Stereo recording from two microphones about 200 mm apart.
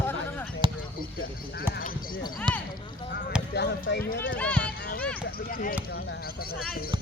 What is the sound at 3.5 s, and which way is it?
Speech, 55° left (ahead or behind).